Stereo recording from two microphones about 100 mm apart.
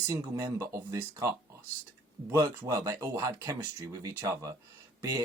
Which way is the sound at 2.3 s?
30° right (ahead or behind).